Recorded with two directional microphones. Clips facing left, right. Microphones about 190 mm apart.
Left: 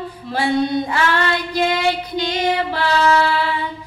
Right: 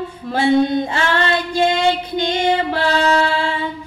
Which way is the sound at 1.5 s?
25° right (ahead or behind).